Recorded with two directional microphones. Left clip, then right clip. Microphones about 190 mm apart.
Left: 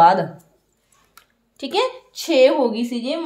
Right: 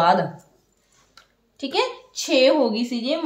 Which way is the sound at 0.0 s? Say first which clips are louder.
Left 5 dB; 30° left (ahead or behind).